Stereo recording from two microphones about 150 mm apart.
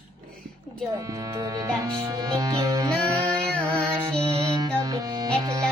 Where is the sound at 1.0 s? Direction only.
20° right (ahead or behind).